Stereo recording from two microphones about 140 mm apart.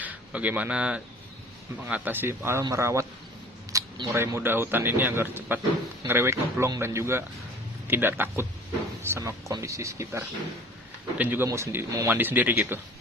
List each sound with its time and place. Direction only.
0.0 s speech: 10° right (ahead or behind)